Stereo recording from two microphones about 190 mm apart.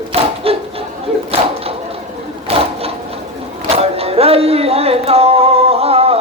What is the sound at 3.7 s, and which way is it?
Music, 30° right (ahead or behind).